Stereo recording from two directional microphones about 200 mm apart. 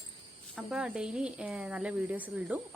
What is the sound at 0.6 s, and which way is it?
Speech, 5° right (ahead or behind).